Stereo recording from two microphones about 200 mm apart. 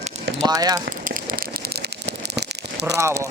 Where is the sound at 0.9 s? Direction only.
45° right (ahead or behind).